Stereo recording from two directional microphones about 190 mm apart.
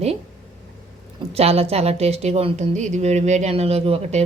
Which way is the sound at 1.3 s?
30° right (ahead or behind).